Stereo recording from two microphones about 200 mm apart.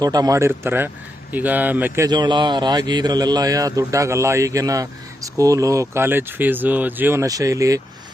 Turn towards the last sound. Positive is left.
turn(degrees=-15)  # may be behind; listen again after turning